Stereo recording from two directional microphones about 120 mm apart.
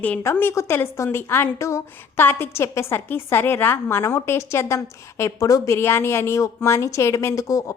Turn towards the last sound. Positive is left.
turn(degrees=30)  # may be behind; listen again after turning